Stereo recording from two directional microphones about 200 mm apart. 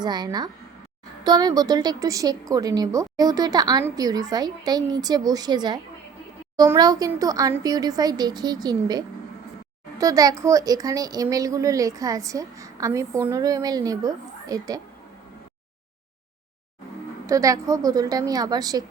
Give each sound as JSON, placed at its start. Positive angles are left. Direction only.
{"t": 0.0, "sound": "a woman's voice", "side_deg": -20}
{"t": 17.2, "sound": "speech", "side_deg": -15}